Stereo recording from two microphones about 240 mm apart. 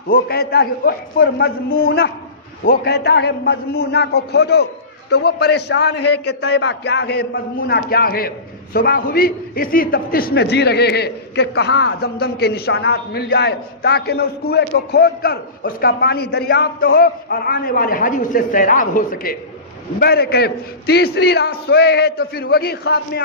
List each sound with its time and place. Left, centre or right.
0.1 s a man's voice: left